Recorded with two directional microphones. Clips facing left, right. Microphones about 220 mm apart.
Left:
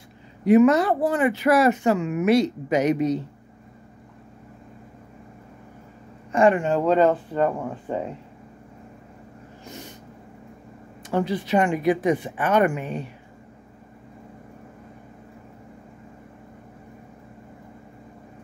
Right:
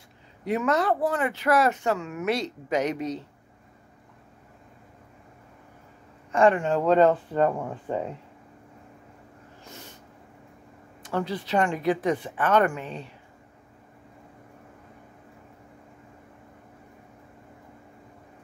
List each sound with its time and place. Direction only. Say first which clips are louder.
0.5 s speech: left 8 dB; 10° left (ahead or behind)
6.3 s speech: left 2 dB; 10° left (ahead or behind)
9.7 s a sound: left 6 dB; 15° left (ahead or behind)
11.0 s speech: left 5 dB; 15° left (ahead or behind)